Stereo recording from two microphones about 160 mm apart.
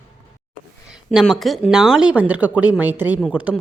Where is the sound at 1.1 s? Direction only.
Centre (ahead or behind).